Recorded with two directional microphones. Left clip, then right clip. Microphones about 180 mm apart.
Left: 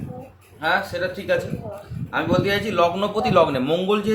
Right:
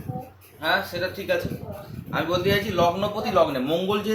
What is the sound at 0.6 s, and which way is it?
A man's voice, 35° left (ahead or behind).